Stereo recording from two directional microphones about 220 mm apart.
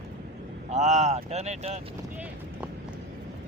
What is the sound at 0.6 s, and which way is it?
Speech, 30° right (ahead or behind).